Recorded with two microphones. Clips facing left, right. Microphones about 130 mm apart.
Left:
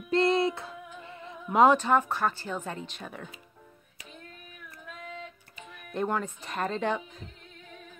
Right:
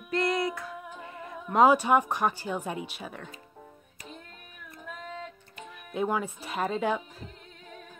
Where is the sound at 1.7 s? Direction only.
15° right (ahead or behind).